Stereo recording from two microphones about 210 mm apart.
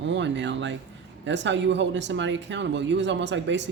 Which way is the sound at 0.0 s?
60° right (ahead or behind).